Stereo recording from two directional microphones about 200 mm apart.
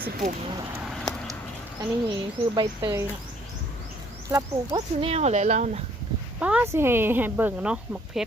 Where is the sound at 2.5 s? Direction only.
20° right (ahead or behind).